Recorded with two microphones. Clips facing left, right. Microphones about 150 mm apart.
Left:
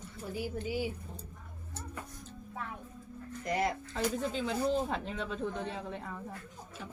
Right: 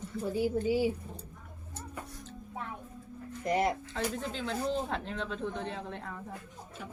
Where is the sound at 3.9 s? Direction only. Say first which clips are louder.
Left 2 dB; 5° left (ahead or behind).